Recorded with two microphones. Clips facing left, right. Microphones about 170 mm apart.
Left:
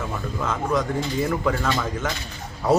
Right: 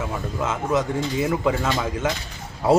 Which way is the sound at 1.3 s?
15° right (ahead or behind).